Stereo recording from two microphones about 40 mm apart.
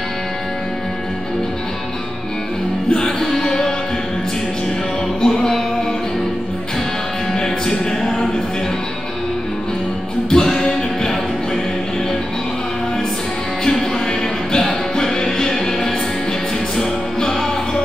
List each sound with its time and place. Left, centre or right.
2.9 s music: left
5.2 s music: centre
7.3 s music: centre
10.3 s music: centre
13.7 s music: centre